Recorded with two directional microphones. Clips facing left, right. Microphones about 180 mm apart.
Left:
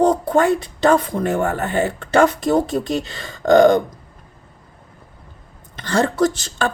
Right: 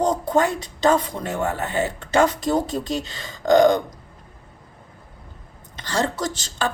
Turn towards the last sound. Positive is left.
turn(degrees=55)  # may be behind; listen again after turning